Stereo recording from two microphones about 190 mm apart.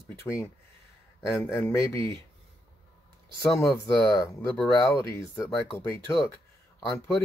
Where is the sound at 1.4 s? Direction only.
10° left (ahead or behind).